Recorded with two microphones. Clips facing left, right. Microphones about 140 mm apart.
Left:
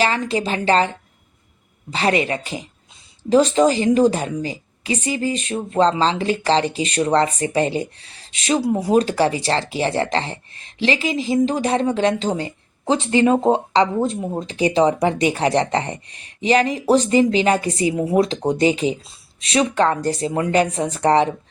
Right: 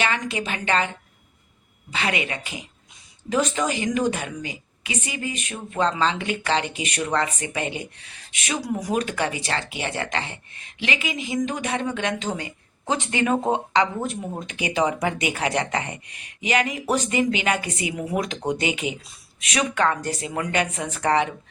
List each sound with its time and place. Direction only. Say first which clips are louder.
0.0 s a woman's voice: left 6 dB; 35° left (ahead or behind)